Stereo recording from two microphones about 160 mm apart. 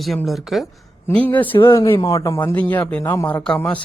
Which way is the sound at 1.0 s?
10° left (ahead or behind).